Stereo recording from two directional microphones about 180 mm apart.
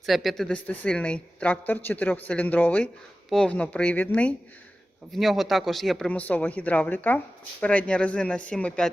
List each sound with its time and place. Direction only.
0.0 s a woman's voice: centre (ahead or behind)